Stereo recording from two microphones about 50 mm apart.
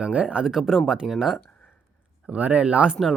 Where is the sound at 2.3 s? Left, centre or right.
Right.